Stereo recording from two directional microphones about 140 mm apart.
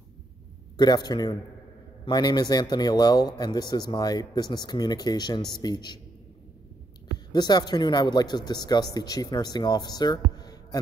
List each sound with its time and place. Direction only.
0.7 s a man's voice: 30° left (ahead or behind)
7.3 s speech: 30° left (ahead or behind)